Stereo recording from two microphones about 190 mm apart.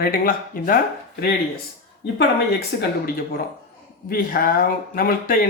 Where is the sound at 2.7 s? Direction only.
60° left (ahead or behind).